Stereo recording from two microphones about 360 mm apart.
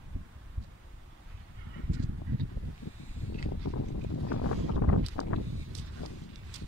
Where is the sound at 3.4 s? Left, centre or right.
Left.